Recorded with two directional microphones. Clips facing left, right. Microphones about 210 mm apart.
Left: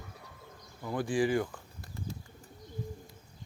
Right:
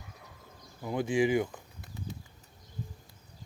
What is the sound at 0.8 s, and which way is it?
Speech, 20° right (ahead or behind).